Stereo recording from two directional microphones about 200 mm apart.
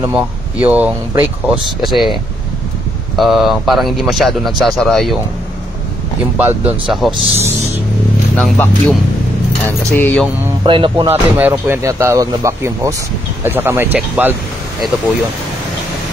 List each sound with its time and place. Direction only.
0.0 s speech: 5° right (ahead or behind)
3.2 s speech: centre (ahead or behind)
6.3 s speech: 5° right (ahead or behind)
8.4 s speech: 5° left (ahead or behind)
10.6 s speech: 25° right (ahead or behind)
11.3 s speech: 10° right (ahead or behind)